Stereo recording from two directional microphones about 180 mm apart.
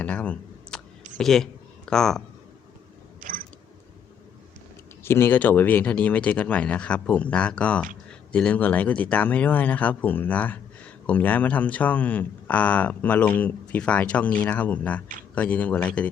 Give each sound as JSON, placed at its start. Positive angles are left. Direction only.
{"t": 0.0, "sound": "clicking", "side_deg": 5}
{"t": 1.1, "sound": "speech", "side_deg": 5}
{"t": 3.2, "sound": "a sound", "side_deg": -50}
{"t": 5.0, "sound": "speech", "side_deg": 15}